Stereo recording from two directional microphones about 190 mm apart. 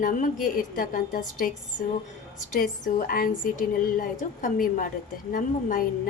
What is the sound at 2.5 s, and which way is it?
A woman's voice, 45° left (ahead or behind).